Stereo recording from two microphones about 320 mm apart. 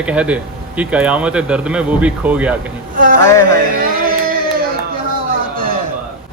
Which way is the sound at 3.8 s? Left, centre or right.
Right.